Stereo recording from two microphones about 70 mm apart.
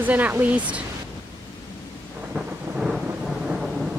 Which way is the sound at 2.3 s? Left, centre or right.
Centre.